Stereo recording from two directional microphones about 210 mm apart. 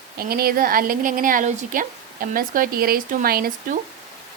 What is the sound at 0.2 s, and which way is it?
A woman's voice, 45° right (ahead or behind).